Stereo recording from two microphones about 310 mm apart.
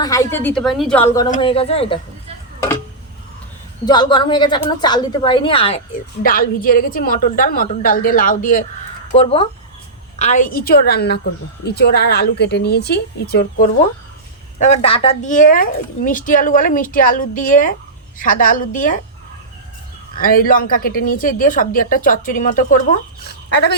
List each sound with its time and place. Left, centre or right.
0.0 s a woman's voice: centre
3.8 s a woman's voice: centre; by 13.7 s left
14.6 s speech: centre
20.1 s speech: left